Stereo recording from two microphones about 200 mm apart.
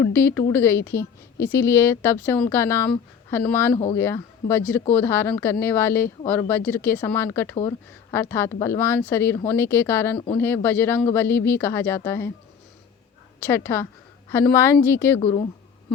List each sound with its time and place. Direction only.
0.0 s speech: 10° left (ahead or behind)
13.5 s speech: 10° left (ahead or behind)
15.2 s speech: 30° left (ahead or behind)